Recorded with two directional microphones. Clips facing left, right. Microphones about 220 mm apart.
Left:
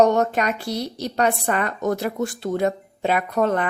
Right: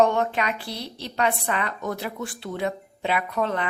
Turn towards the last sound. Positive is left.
turn(degrees=50)  # may be behind; listen again after turning